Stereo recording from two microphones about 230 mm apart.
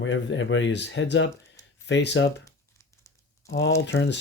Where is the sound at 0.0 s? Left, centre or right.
Left.